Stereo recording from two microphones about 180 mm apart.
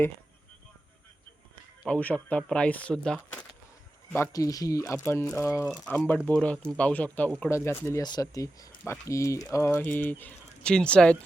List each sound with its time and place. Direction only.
1.8 s speech: 5° left (ahead or behind)
4.1 s speech: 15° left (ahead or behind)
5.6 s speech: centre (ahead or behind)